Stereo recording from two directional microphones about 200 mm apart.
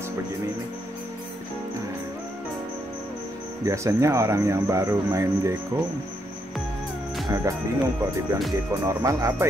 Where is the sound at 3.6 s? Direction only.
15° right (ahead or behind).